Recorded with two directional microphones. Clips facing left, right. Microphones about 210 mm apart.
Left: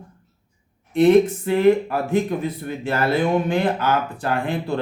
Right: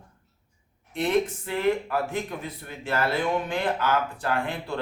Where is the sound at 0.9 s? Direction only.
20° left (ahead or behind).